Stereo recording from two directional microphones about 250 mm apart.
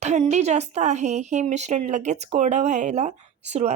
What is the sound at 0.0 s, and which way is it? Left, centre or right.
Speech, right.